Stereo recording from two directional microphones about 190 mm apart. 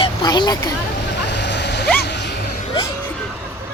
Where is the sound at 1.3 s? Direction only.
65° left (ahead or behind).